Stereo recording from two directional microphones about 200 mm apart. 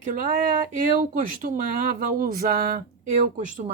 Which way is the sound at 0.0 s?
45° right (ahead or behind).